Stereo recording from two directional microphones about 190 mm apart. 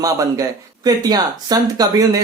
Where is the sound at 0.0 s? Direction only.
20° right (ahead or behind).